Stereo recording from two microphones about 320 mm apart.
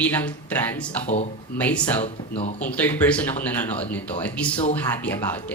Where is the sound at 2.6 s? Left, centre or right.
Centre.